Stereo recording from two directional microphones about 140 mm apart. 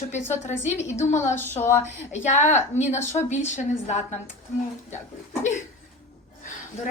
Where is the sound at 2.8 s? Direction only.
55° left (ahead or behind).